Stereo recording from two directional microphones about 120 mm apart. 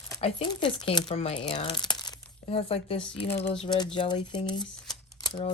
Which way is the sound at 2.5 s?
55° left (ahead or behind).